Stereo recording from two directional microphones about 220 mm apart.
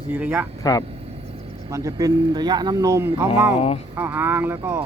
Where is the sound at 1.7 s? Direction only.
15° right (ahead or behind).